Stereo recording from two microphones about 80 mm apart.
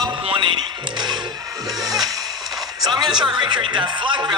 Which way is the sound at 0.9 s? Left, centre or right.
Right.